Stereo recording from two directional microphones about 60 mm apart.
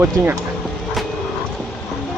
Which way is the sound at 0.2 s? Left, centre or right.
Right.